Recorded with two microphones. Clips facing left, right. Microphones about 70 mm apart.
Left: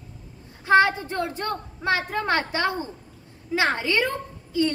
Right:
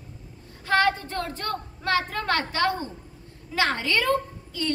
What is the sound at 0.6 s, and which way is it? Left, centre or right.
A woman's voice, left.